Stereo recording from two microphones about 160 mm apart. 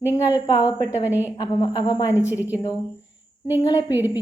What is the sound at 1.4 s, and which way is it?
Speech, 25° left (ahead or behind).